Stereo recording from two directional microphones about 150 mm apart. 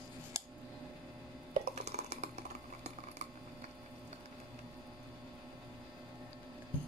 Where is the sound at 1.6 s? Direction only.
45° right (ahead or behind).